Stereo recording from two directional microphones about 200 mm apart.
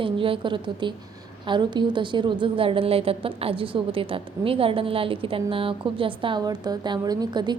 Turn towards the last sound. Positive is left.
turn(degrees=-20)  # may be behind; listen again after turning